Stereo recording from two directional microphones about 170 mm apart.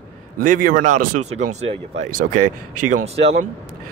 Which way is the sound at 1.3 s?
40° right (ahead or behind).